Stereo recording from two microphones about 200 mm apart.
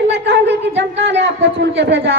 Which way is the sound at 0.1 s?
60° right (ahead or behind).